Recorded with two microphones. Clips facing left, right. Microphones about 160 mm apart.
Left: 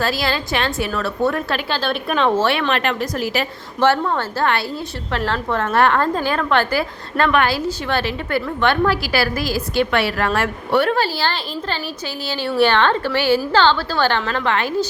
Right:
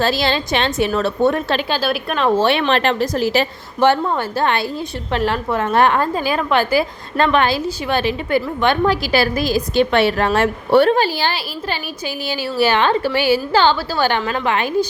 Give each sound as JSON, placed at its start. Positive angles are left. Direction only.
{"t": 0.0, "sound": "a woman's voice", "side_deg": -25}
{"t": 1.8, "sound": "a woman's voice", "side_deg": -5}
{"t": 2.3, "sound": "a woman's voice", "side_deg": -20}
{"t": 3.8, "sound": "a woman's voice", "side_deg": -15}
{"t": 10.9, "sound": "a woman's voice", "side_deg": -15}